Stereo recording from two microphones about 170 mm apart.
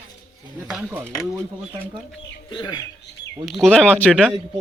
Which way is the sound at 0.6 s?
5° right (ahead or behind).